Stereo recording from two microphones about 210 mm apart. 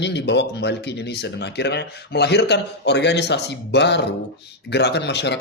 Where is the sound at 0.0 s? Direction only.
55° left (ahead or behind).